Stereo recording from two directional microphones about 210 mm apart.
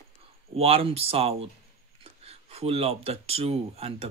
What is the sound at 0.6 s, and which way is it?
Speech, 30° right (ahead or behind).